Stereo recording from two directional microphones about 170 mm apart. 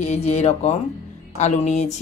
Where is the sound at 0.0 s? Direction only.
40° left (ahead or behind).